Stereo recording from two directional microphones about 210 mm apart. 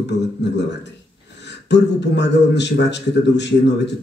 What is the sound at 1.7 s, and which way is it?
A man's voice, 55° left (ahead or behind).